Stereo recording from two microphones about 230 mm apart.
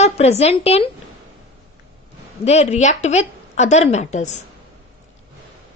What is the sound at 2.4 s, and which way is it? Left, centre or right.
Speech, left.